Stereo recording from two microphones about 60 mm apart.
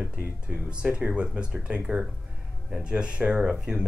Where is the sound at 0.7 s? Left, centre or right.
Centre.